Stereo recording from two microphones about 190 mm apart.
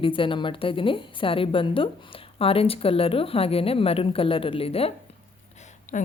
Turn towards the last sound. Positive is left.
turn(degrees=40)  # may be behind; listen again after turning